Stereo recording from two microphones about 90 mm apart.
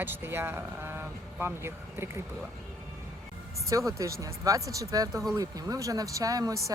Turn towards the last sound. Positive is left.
turn(degrees=-40)  # may be behind; listen again after turning